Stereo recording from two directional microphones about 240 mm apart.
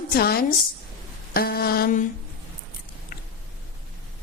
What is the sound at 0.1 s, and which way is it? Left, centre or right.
A woman's voice, left.